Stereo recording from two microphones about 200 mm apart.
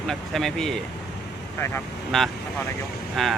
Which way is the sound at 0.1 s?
Centre (ahead or behind).